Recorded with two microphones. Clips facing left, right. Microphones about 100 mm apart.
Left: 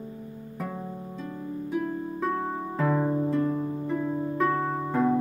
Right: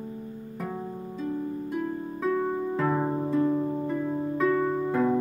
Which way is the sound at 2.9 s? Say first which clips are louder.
Left 1 dB; 10° right (ahead or behind).